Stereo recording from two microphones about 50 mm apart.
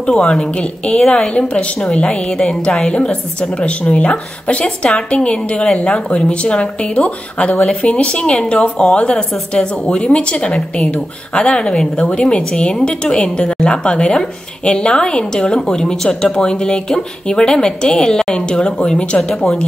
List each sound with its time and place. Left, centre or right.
0.0 s a woman's voice: left